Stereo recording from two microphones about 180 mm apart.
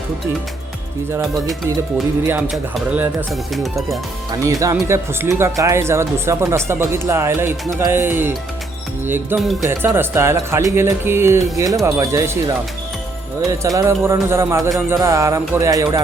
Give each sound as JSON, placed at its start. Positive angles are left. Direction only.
{"t": 2.2, "sound": "speech", "side_deg": -10}
{"t": 4.6, "sound": "speech", "side_deg": -15}
{"t": 9.4, "sound": "speech", "side_deg": 0}
{"t": 9.6, "sound": "speech", "side_deg": -10}